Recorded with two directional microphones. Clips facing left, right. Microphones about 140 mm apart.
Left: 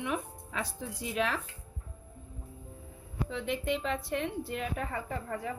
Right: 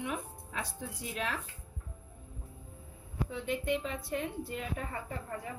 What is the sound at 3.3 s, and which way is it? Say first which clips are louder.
Speech: left 1 dB; 90° left.